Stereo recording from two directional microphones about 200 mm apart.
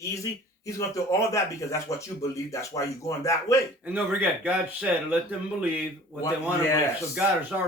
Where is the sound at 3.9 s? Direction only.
10° right (ahead or behind).